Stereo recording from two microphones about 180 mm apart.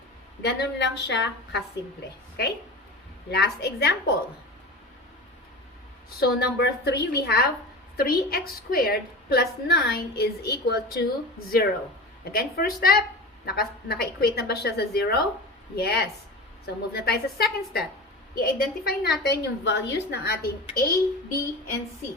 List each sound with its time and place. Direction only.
0.4 s a woman's voice: 70° left (ahead or behind)
3.3 s a woman's voice: 65° left (ahead or behind)
6.1 s a woman's voice: 60° left (ahead or behind)